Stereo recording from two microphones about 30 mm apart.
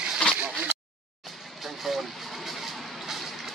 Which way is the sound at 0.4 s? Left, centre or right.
Right.